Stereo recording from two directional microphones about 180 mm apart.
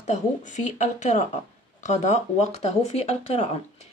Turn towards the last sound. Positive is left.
turn(degrees=35)  # may be behind; listen again after turning